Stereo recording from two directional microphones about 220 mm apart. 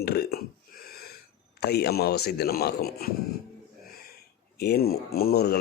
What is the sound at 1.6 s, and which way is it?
A man's voice, 45° left (ahead or behind).